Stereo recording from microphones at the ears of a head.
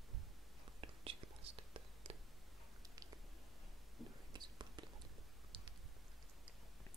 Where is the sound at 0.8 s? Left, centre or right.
Right.